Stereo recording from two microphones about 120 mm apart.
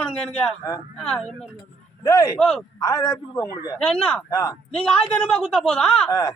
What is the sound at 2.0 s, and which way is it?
Speech, 30° left (ahead or behind).